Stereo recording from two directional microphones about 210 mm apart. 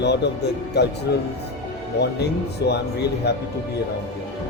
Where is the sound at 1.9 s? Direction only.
50° left (ahead or behind).